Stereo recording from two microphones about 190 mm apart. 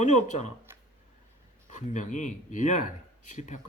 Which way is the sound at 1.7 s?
40° left (ahead or behind).